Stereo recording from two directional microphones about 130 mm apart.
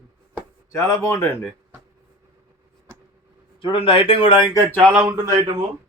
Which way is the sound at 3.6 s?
40° left (ahead or behind).